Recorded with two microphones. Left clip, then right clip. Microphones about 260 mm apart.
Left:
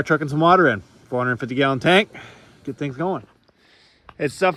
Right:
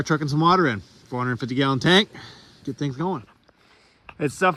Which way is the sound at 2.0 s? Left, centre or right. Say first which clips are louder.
Left 2 dB; centre.